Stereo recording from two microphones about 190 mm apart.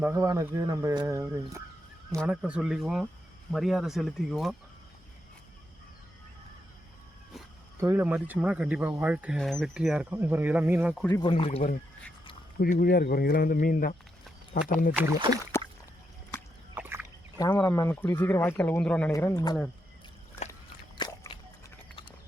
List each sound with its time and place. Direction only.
0.0 s speech: 15° right (ahead or behind)
7.8 s speech: 10° right (ahead or behind)
11.1 s speech: 25° left (ahead or behind)
12.5 s speech: 45° left (ahead or behind)
15.5 s a sound: 15° left (ahead or behind)
16.7 s a sound: 10° right (ahead or behind)
17.3 s speech: 20° left (ahead or behind)
19.1 s speech: 20° left (ahead or behind)
21.0 s a sound: 20° left (ahead or behind)